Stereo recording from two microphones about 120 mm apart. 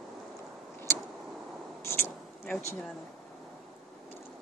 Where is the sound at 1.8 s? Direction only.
20° left (ahead or behind).